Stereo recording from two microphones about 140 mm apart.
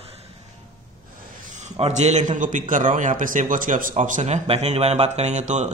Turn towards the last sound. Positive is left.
turn(degrees=-55)  # may be behind; listen again after turning